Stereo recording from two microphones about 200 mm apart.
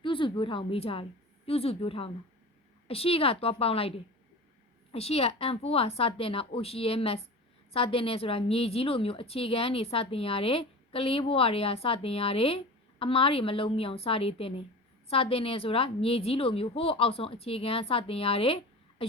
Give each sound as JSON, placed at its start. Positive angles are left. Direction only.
{"t": 0.0, "sound": "a woman's voice", "side_deg": 25}